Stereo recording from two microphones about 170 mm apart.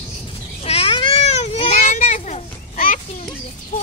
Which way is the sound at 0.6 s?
35° left (ahead or behind).